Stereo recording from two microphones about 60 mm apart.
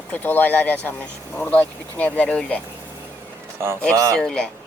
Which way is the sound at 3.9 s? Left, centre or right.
Right.